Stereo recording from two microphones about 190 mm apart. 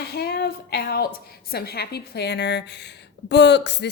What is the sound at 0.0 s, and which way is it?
A woman's voice, 55° left (ahead or behind).